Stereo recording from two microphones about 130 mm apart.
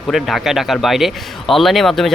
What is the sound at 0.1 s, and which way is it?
Speech, centre (ahead or behind).